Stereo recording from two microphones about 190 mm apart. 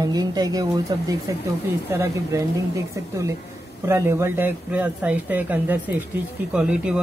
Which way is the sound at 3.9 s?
15° right (ahead or behind).